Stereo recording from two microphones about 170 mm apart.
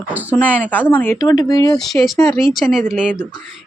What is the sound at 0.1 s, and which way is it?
Speech, 10° right (ahead or behind).